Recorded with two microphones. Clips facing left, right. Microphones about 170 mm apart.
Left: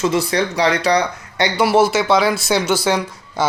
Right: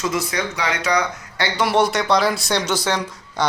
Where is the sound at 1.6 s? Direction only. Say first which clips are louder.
Left 4 dB; 5° left (ahead or behind).